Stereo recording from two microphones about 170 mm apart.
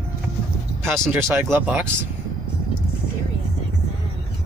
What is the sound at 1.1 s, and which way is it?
Speech, 15° right (ahead or behind).